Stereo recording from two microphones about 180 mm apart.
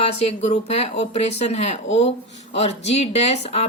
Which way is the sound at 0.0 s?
35° left (ahead or behind).